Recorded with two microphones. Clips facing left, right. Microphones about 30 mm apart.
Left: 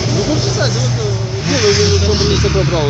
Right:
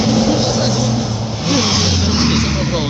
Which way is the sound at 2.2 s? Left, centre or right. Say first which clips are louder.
Left 1 dB; right.